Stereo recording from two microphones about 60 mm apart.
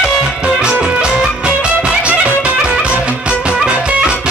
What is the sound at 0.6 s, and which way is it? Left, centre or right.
Music, centre.